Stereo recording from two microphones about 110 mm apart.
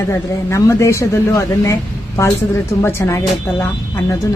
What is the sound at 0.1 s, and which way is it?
Speech, 25° left (ahead or behind).